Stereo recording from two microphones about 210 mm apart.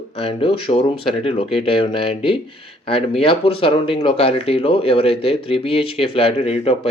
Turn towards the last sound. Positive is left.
turn(degrees=30)  # may be behind; listen again after turning